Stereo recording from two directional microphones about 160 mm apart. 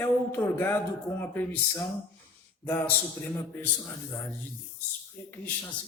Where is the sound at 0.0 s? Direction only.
15° left (ahead or behind).